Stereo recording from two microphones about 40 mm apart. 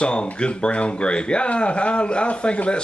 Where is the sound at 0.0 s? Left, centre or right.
Left.